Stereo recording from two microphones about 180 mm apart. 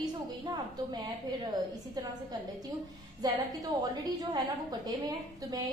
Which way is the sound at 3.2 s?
20° right (ahead or behind).